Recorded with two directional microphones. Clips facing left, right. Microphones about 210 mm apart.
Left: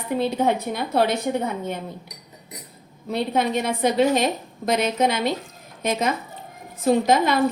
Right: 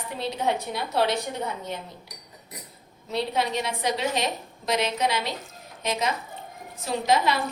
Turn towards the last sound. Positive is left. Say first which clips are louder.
# left 5 dB
turn(degrees=50)  # may be behind; listen again after turning